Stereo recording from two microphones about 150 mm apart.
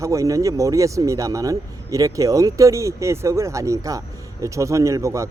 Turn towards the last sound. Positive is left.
turn(degrees=-20)  # may be behind; listen again after turning